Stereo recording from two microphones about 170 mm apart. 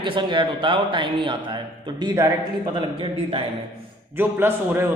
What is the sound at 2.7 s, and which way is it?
Speech, 30° right (ahead or behind).